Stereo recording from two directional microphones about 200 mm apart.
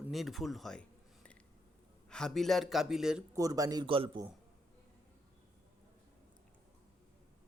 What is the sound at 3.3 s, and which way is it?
Speech, 15° right (ahead or behind).